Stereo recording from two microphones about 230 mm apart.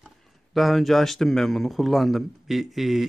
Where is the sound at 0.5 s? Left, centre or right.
Centre.